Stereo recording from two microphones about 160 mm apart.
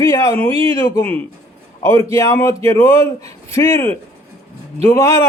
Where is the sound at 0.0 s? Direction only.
20° left (ahead or behind).